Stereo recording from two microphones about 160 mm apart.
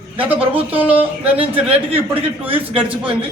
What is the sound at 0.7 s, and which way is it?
Speech, 10° right (ahead or behind).